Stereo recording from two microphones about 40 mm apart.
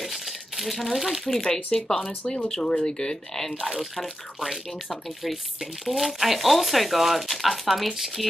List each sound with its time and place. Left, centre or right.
0.0 s crumpling: centre
1.4 s speech: centre
2.0 s speech: left
2.4 s speech: centre
3.9 s speech: centre